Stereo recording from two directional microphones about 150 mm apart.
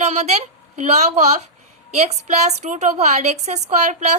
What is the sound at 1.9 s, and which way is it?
A woman's voice, 45° right (ahead or behind).